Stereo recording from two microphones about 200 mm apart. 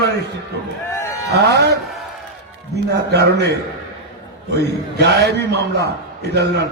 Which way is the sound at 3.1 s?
55° right (ahead or behind).